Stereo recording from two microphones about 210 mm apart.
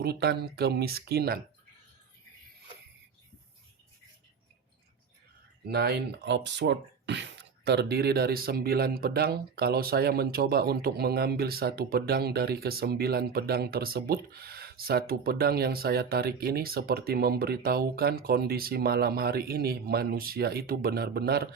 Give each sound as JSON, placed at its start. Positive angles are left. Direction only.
{"t": 0.0, "sound": "speech", "side_deg": -50}
{"t": 5.7, "sound": "speech", "side_deg": -50}